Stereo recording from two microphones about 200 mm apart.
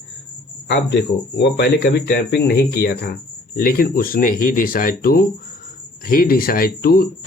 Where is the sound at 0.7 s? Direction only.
55° left (ahead or behind).